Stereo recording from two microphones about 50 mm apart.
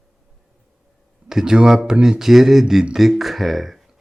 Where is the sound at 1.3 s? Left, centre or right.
Centre.